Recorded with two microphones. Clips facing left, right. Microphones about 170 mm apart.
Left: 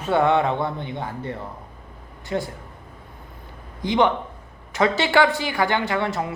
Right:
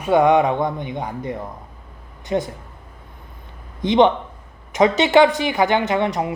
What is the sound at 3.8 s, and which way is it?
A woman's voice, 20° right (ahead or behind).